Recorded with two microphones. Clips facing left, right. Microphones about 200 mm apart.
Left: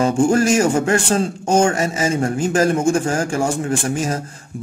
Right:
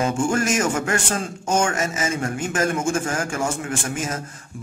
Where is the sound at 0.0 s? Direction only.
30° left (ahead or behind).